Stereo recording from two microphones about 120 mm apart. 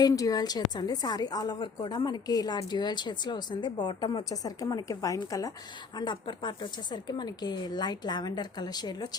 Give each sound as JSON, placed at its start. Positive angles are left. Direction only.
{"t": 0.0, "sound": "a woman's voice", "side_deg": 30}